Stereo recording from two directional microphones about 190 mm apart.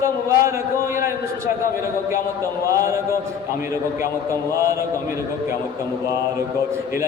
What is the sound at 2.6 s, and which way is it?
Speech, 15° right (ahead or behind).